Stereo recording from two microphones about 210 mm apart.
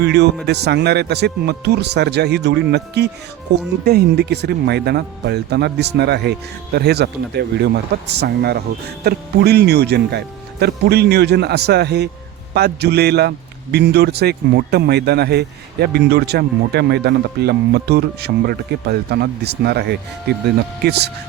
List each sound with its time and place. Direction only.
0.0 s a man's voice: 55° right (ahead or behind)